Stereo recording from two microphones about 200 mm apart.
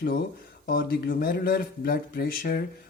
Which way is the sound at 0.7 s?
50° left (ahead or behind).